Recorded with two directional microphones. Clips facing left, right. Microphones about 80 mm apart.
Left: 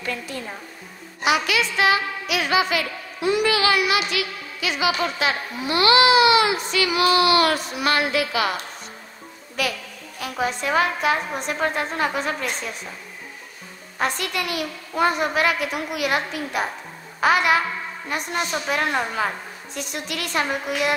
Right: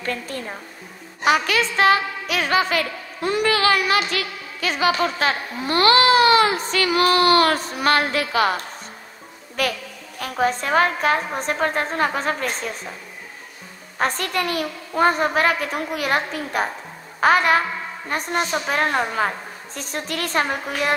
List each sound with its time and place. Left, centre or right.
0.0 s a woman's voice: right
9.6 s a woman's voice: right
13.9 s a woman's voice: right